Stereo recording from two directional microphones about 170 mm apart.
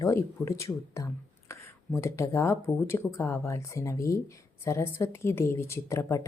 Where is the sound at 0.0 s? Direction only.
15° left (ahead or behind).